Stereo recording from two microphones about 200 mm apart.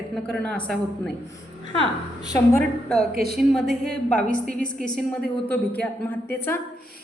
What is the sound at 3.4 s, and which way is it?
A woman's voice, centre (ahead or behind).